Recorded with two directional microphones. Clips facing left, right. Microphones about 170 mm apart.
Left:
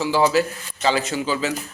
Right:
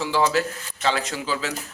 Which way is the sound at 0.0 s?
5° left (ahead or behind).